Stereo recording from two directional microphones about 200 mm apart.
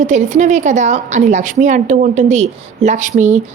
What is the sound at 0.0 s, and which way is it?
A woman's voice, 35° right (ahead or behind).